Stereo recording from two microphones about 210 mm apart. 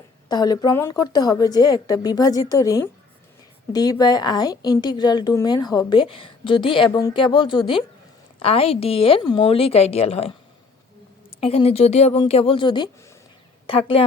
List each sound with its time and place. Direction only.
0.3 s a woman's voice: 20° left (ahead or behind)